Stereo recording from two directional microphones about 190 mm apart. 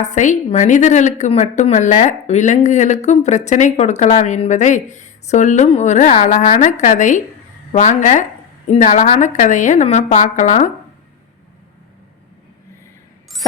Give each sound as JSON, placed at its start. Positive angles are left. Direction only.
{"t": 0.0, "sound": "a woman's voice", "side_deg": 40}